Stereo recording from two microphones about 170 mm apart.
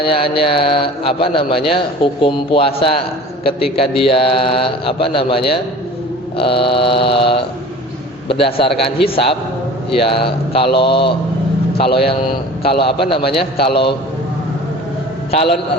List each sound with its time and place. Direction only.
0.1 s speech: 30° left (ahead or behind)
15.3 s a man's voice: 35° left (ahead or behind)